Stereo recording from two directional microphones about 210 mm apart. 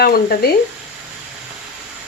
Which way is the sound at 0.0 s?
45° left (ahead or behind).